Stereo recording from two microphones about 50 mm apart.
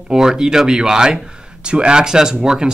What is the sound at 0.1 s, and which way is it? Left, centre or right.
Speech, centre.